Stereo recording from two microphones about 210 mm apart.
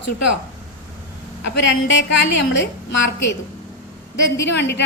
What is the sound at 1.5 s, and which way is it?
A woman's voice, 60° left (ahead or behind).